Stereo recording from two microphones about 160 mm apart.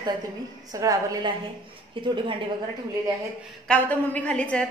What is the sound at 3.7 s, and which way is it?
Speech, 10° left (ahead or behind).